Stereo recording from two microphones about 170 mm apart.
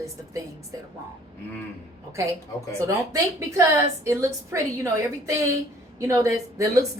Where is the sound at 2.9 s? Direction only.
15° right (ahead or behind).